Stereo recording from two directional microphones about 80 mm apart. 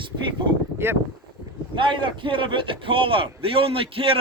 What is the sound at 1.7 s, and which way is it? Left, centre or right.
Speech, right.